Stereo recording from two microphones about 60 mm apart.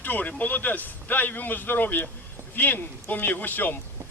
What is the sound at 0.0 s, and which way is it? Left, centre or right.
A man's voice, left.